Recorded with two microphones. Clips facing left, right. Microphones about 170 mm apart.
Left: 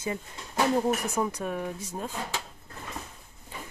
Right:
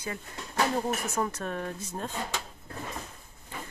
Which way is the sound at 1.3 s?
10° left (ahead or behind).